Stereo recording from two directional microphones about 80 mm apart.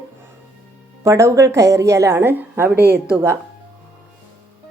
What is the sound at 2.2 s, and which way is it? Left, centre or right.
Speech, right.